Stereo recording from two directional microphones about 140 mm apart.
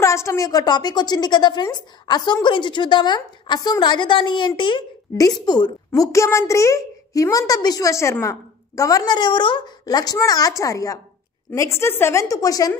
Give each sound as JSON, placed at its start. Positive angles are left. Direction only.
{"t": 0.0, "sound": "a woman's voice", "side_deg": 20}
{"t": 5.9, "sound": "a woman's voice", "side_deg": 20}